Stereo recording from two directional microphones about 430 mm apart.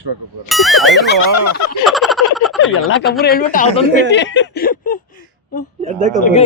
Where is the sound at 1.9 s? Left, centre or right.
Centre.